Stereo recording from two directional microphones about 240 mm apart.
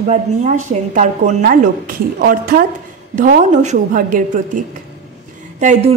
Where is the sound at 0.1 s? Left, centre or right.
Right.